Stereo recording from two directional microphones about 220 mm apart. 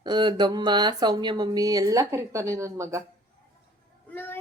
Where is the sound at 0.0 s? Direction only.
20° right (ahead or behind).